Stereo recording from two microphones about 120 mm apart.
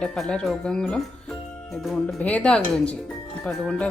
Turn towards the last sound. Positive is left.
turn(degrees=10)  # may be behind; listen again after turning